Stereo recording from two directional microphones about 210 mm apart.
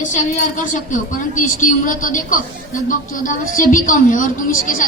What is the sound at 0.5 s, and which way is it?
A woman's voice, 40° left (ahead or behind).